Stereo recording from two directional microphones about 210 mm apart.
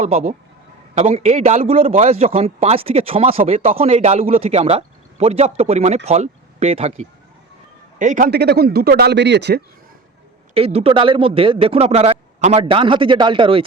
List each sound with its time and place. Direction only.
0.0 s a man's voice: 30° right (ahead or behind); by 9.6 s 55° right (ahead or behind)
10.5 s a man's voice: 30° right (ahead or behind)